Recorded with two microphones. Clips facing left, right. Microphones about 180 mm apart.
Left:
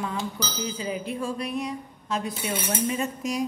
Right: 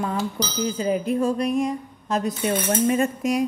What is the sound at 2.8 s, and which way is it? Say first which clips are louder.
Speech: right 7 dB; 55° right (ahead or behind).